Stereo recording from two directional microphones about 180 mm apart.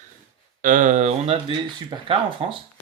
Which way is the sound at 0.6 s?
45° right (ahead or behind).